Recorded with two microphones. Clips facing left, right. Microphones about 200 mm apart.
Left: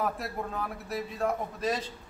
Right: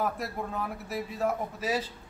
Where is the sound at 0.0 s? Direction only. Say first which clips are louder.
Even; centre (ahead or behind).